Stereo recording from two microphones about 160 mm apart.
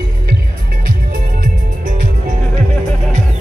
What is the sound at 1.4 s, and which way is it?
Music, 55° right (ahead or behind).